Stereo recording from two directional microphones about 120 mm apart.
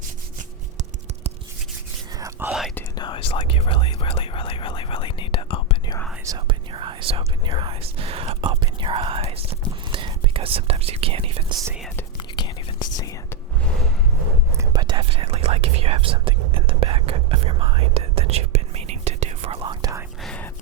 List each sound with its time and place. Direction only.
2.5 s whispering: centre (ahead or behind)
2.9 s whispering: 40° left (ahead or behind)
3.2 s whispering: 50° left (ahead or behind)
6.5 s whispering: 45° right (ahead or behind)
12.4 s whispering: 35° left (ahead or behind)
14.6 s whispering: 35° right (ahead or behind); by 19.5 s 65° right (ahead or behind)
20.2 s whispering: 10° left (ahead or behind)